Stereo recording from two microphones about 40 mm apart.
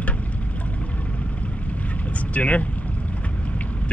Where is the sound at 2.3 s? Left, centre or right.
Left.